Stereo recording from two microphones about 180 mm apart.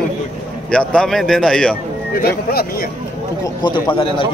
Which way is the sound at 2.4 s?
60° left (ahead or behind).